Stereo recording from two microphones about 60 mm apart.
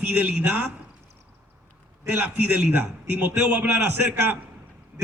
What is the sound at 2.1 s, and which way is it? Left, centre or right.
A man's voice, right.